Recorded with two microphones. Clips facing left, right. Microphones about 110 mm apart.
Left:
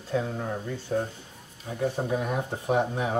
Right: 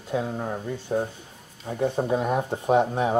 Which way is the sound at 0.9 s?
30° right (ahead or behind).